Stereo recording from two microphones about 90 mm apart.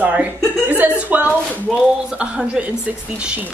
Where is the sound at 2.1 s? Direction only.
10° right (ahead or behind).